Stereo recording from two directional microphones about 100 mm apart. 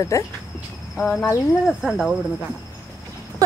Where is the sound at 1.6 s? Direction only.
Centre (ahead or behind).